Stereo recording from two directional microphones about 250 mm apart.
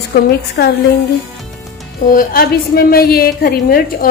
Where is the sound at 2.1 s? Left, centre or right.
Left.